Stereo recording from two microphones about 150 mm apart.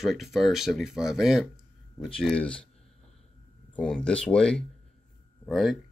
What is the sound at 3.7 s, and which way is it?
Speech, 5° left (ahead or behind).